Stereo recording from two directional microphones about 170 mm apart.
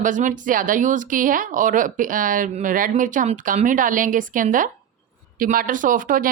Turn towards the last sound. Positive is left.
turn(degrees=-50)  # may be behind; listen again after turning